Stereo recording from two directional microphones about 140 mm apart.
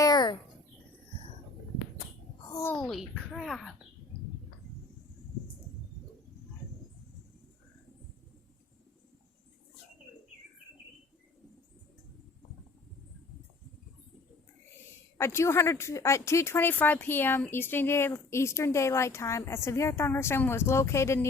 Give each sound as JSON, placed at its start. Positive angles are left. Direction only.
{"t": 0.0, "sound": "bird", "side_deg": 30}
{"t": 2.5, "sound": "a sound", "side_deg": 20}
{"t": 2.7, "sound": "speech", "side_deg": 0}
{"t": 15.2, "sound": "speech", "side_deg": 20}